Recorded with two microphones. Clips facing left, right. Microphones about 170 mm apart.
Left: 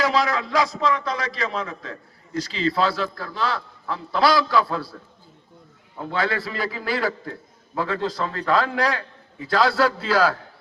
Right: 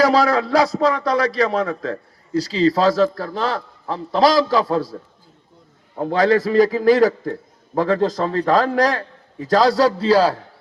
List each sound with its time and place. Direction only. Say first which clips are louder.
0.0 s a man's voice: right 6 dB; 35° right (ahead or behind)
6.0 s a man's voice: right 9 dB; 40° right (ahead or behind)